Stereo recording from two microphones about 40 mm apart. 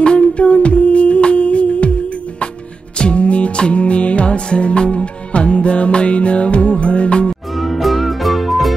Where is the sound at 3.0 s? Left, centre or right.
Left.